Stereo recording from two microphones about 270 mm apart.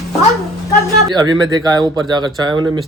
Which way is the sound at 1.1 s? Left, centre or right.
Centre.